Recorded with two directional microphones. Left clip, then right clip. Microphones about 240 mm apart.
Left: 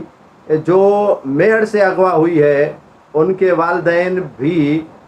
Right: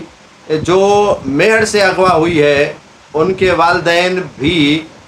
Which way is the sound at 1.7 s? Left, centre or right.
Right.